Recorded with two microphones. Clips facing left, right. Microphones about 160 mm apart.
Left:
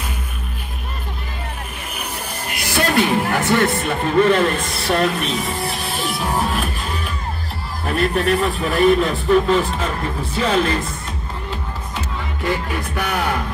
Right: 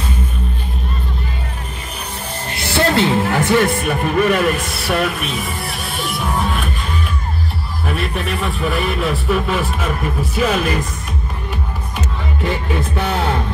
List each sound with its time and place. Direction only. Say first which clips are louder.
2.7 s speech: right 2 dB; 20° right (ahead or behind)
4.9 s music: left 1 dB; 5° right (ahead or behind)
7.8 s speech: left 4 dB; centre (ahead or behind)
12.4 s music: right 1 dB; 25° right (ahead or behind)